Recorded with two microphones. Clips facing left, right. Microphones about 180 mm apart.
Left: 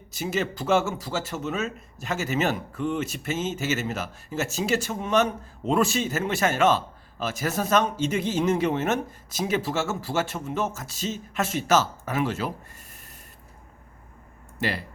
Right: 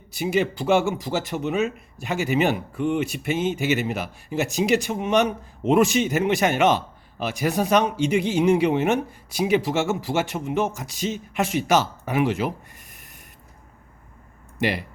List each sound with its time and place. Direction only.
0.1 s speech: 10° right (ahead or behind)
14.6 s speech: 15° right (ahead or behind)